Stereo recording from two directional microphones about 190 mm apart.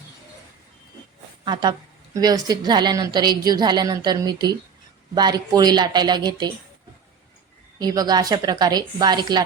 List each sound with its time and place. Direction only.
2.2 s a woman's voice: 20° right (ahead or behind)
7.8 s a woman's voice: 20° right (ahead or behind)